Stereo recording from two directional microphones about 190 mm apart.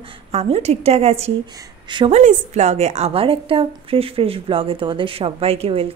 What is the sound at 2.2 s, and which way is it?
A woman's voice, 40° right (ahead or behind).